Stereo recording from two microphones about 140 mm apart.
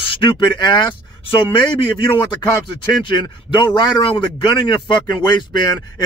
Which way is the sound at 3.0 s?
35° left (ahead or behind).